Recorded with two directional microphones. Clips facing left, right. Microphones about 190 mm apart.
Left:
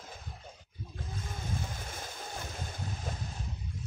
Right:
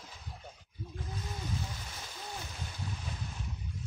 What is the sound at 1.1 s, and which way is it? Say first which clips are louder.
Stream: left 1 dB; 50° left (ahead or behind).